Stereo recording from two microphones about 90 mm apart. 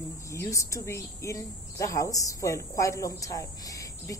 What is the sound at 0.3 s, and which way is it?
Speech, 35° left (ahead or behind).